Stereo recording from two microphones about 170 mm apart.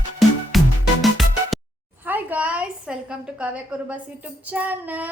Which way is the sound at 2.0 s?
10° right (ahead or behind).